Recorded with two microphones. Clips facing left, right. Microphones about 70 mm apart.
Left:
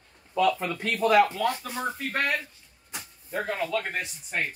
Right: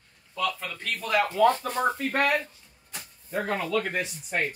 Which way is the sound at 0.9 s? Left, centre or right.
Centre.